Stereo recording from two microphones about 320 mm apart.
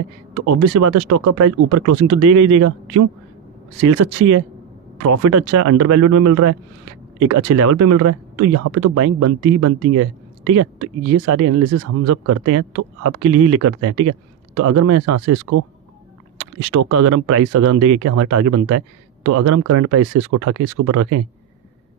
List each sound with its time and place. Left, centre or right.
0.7 s speech: right